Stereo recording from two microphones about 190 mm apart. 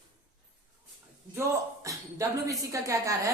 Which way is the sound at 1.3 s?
15° right (ahead or behind).